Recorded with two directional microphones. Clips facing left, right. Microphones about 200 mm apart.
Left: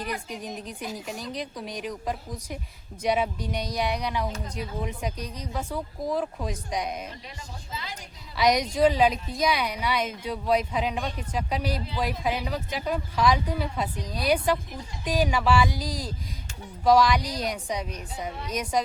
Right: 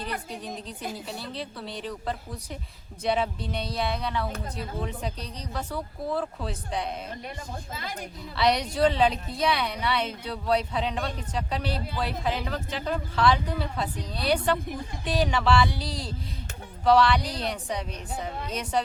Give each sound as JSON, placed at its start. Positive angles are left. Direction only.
{"t": 0.0, "sound": "speech", "side_deg": 10}
{"t": 7.7, "sound": "a woman's voice", "side_deg": -50}
{"t": 8.4, "sound": "speech", "side_deg": 10}